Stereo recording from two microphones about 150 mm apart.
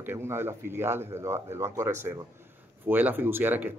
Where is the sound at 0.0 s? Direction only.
15° right (ahead or behind).